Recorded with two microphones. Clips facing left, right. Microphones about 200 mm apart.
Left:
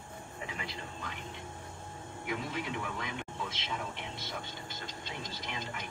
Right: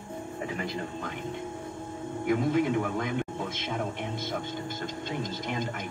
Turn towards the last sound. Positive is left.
turn(degrees=-50)  # may be behind; listen again after turning